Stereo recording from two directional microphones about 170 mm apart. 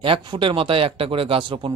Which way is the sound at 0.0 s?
30° right (ahead or behind).